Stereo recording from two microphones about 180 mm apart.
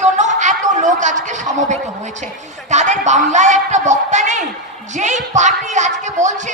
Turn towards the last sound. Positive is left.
turn(degrees=-45)  # may be behind; listen again after turning